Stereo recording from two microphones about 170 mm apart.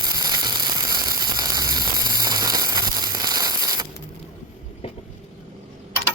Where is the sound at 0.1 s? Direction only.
25° right (ahead or behind).